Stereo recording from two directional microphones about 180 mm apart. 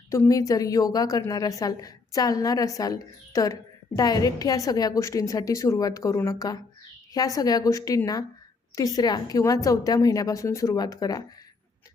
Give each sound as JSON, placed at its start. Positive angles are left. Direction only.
{"t": 0.1, "sound": "a woman's voice", "side_deg": 20}